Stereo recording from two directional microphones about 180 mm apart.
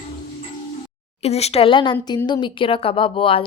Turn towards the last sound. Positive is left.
turn(degrees=30)  # may be behind; listen again after turning